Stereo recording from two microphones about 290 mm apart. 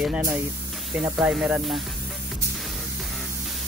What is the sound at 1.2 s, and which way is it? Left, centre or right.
Speech, centre.